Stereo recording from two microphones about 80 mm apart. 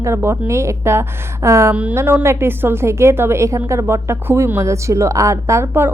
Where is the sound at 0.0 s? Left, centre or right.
Right.